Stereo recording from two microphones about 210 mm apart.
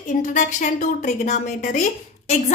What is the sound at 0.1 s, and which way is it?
A woman's voice, 35° left (ahead or behind).